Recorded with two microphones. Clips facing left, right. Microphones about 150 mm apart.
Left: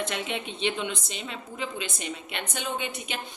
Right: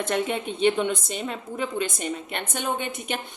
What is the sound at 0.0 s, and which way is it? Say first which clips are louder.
A woman's voice: right 6 dB; 45° right (ahead or behind).